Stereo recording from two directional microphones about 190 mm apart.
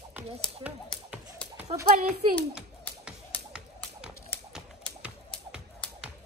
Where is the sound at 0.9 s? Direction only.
5° left (ahead or behind).